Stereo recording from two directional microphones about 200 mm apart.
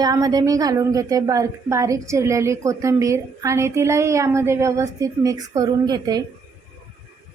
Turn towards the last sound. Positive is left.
turn(degrees=-20)  # may be behind; listen again after turning